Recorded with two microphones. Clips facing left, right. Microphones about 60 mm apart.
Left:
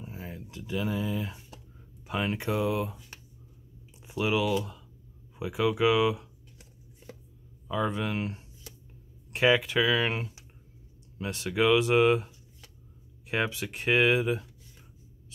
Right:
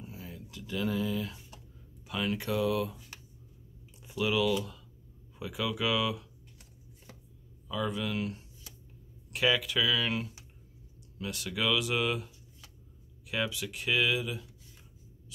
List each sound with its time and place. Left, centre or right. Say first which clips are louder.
0.0 s a sound: left 4 dB; left
0.6 s speech: left 1 dB; centre
4.0 s speech: left 1 dB; left
7.6 s speech: left 4 dB; left
13.3 s speech: left 4 dB; left